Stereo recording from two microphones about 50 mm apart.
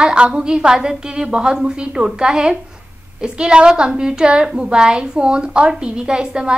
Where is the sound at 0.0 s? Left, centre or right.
Centre.